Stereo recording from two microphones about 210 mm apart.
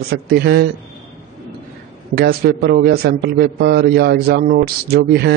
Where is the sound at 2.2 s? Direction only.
50° right (ahead or behind).